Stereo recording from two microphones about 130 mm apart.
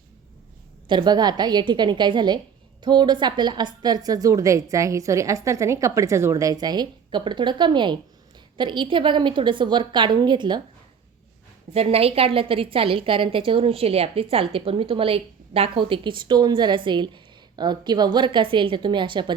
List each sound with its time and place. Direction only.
0.9 s a woman's voice: 35° right (ahead or behind)
11.7 s a woman's voice: 50° right (ahead or behind)